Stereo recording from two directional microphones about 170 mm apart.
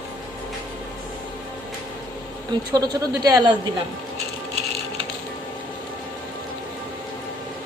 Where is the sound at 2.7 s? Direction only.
25° right (ahead or behind).